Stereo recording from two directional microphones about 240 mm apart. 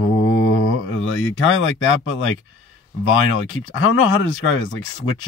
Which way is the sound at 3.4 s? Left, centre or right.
Left.